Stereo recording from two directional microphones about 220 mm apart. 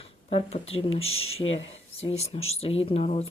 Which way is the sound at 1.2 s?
70° left (ahead or behind).